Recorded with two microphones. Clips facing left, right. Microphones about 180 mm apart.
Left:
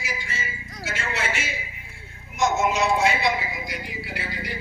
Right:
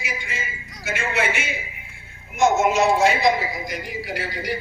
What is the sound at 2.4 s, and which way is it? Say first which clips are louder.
A man's voice: right 4 dB; 45° right (ahead or behind).